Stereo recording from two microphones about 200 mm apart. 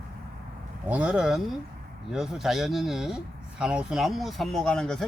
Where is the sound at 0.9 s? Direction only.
5° right (ahead or behind).